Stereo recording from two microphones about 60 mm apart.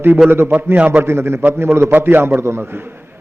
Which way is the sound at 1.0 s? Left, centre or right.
Right.